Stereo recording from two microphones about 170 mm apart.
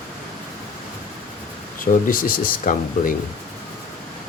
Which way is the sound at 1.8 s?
55° left (ahead or behind).